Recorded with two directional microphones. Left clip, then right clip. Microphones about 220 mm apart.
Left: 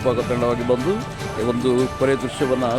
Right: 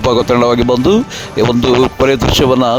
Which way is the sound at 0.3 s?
45° right (ahead or behind).